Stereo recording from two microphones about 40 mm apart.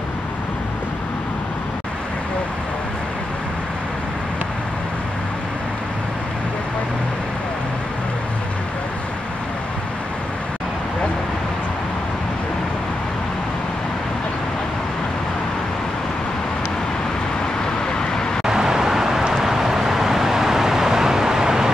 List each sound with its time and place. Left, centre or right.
17.9 s vehicle: centre
18.4 s vehicle: centre